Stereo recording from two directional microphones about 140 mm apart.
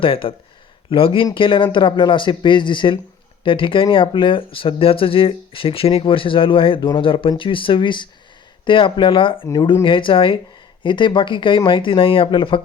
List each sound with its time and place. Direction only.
0.0 s speech: 40° left (ahead or behind)